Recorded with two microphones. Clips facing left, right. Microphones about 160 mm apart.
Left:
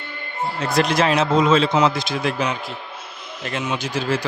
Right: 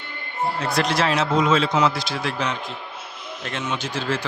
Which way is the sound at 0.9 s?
15° left (ahead or behind).